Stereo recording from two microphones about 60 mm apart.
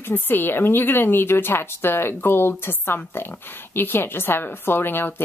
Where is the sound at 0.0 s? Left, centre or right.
Left.